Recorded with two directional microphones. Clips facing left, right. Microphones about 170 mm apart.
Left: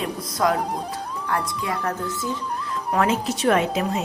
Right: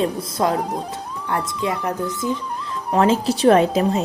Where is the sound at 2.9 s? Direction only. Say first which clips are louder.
Right 5 dB; 30° right (ahead or behind).